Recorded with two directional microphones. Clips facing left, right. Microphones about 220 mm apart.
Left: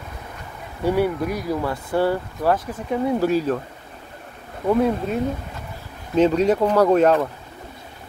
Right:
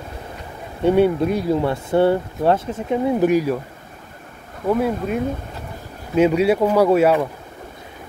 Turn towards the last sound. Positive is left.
turn(degrees=-10)  # may be behind; listen again after turning